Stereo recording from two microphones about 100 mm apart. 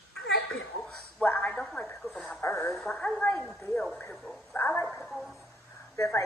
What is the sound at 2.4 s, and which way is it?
Radio, 25° left (ahead or behind).